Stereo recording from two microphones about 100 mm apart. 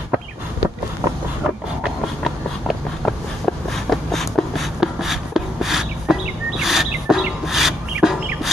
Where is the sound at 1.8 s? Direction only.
Centre (ahead or behind).